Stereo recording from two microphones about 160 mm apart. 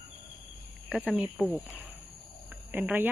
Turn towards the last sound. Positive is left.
turn(degrees=-10)  # may be behind; listen again after turning